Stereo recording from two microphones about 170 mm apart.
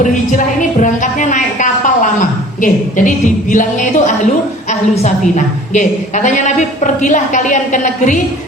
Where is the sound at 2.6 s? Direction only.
50° left (ahead or behind).